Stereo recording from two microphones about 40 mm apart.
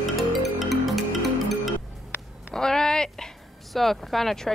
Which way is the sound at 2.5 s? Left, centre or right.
Centre.